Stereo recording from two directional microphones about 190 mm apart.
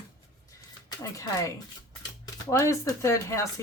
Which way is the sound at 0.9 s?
15° left (ahead or behind).